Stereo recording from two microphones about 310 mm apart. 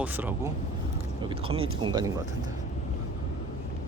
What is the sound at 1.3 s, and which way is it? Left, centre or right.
Speech, centre.